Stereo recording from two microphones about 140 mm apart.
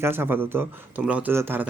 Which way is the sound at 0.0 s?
15° right (ahead or behind).